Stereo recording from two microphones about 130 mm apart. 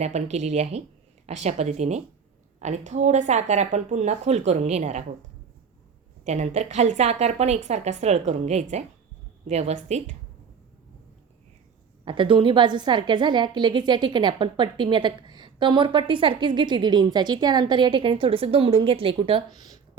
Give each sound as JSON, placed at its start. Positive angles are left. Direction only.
{"t": 0.0, "sound": "a woman's voice", "side_deg": -55}
{"t": 6.2, "sound": "a woman's voice", "side_deg": -60}
{"t": 12.0, "sound": "a woman's voice", "side_deg": -40}